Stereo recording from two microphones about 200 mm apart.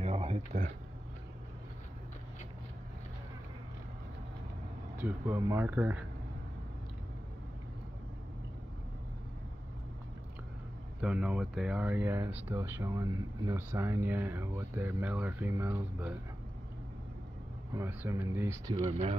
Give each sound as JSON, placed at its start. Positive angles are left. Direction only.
{"t": 0.0, "sound": "a sound", "side_deg": -30}
{"t": 4.9, "sound": "speech", "side_deg": -10}
{"t": 11.0, "sound": "speech", "side_deg": -5}
{"t": 17.7, "sound": "speech", "side_deg": -15}
{"t": 18.8, "sound": "speech", "side_deg": -30}